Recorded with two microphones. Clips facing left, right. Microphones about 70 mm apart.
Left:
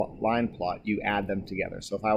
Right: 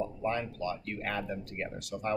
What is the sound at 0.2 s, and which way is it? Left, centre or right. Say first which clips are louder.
Speech: left 8 dB; left.